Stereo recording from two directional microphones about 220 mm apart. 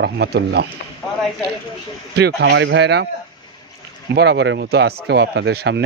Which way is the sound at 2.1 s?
50° right (ahead or behind).